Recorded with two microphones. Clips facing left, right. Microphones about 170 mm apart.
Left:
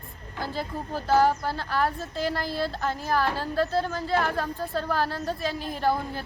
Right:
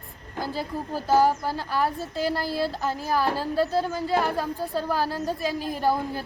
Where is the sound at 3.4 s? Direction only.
10° right (ahead or behind).